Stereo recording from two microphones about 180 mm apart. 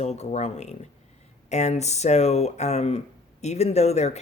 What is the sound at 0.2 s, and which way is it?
Speech, 35° left (ahead or behind).